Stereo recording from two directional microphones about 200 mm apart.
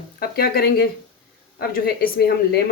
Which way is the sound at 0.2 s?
50° left (ahead or behind).